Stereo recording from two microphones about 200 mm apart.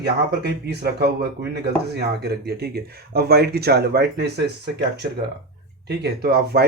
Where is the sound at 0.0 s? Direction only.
55° right (ahead or behind).